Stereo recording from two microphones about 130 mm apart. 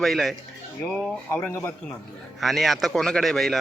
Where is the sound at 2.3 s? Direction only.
Centre (ahead or behind).